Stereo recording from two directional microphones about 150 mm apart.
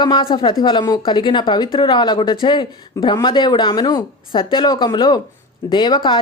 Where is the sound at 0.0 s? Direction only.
30° left (ahead or behind).